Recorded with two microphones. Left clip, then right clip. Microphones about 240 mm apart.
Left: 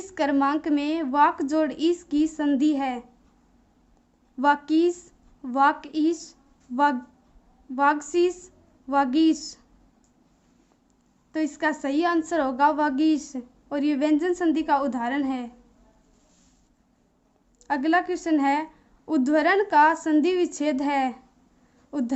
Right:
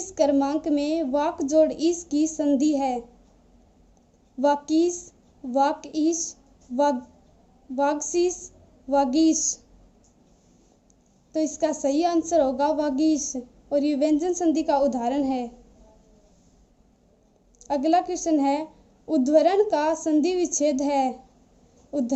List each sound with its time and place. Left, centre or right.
0.1 s a woman's voice: centre
4.4 s a woman's voice: centre
8.1 s a woman's voice: centre
11.3 s a woman's voice: centre
17.7 s a woman's voice: centre